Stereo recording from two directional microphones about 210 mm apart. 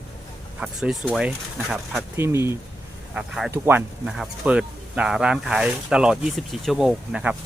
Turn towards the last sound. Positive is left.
turn(degrees=-5)  # may be behind; listen again after turning